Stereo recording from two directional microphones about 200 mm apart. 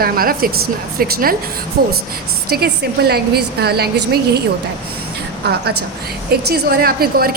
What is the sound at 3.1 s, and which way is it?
A woman's voice, 50° right (ahead or behind).